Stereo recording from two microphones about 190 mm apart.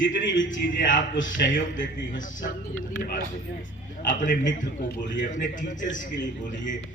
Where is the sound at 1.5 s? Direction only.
45° left (ahead or behind).